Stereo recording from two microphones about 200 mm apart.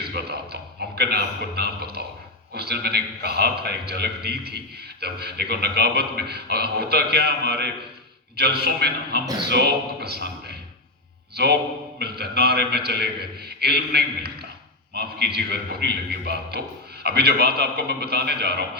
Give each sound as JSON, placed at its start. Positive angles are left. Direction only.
{"t": 0.1, "sound": "a man's voice", "side_deg": -55}
{"t": 11.9, "sound": "a man's voice", "side_deg": -55}